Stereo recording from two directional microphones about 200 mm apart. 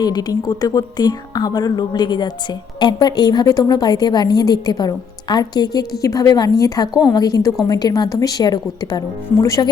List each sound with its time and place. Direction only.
0.0 s speech: 20° left (ahead or behind)